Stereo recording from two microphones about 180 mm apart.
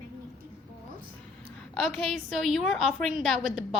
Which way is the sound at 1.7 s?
Centre (ahead or behind).